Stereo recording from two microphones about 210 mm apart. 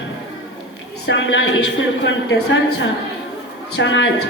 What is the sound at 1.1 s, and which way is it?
A woman's voice, 60° left (ahead or behind).